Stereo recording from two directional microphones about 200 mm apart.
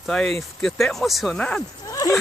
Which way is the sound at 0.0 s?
5° left (ahead or behind).